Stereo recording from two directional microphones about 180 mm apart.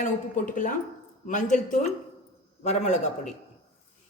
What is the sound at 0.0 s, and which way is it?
A woman's voice, 45° left (ahead or behind).